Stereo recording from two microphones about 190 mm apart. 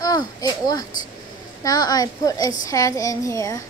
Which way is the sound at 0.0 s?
20° left (ahead or behind).